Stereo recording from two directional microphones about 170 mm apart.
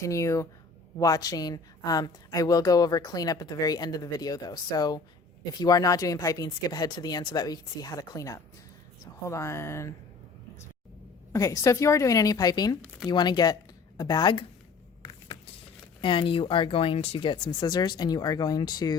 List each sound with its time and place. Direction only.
0.0 s a woman's voice: 20° left (ahead or behind)
11.3 s a woman's voice: 20° left (ahead or behind)
16.0 s a woman's voice: 30° left (ahead or behind)